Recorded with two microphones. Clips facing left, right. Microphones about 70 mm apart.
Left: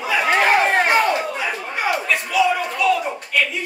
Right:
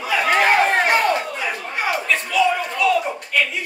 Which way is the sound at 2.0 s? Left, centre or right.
Centre.